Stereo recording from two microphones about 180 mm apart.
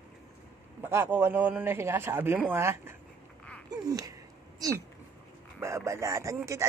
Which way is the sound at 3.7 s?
20° right (ahead or behind).